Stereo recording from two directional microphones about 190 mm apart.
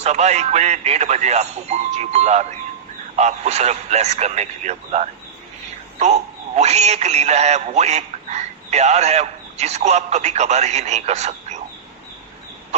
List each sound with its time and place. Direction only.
0.0 s speech: 35° right (ahead or behind)
6.6 s speech: 35° right (ahead or behind)